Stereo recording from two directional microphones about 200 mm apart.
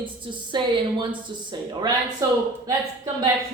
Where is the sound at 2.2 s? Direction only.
15° right (ahead or behind).